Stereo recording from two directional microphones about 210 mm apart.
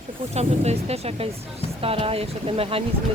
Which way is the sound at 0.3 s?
30° right (ahead or behind).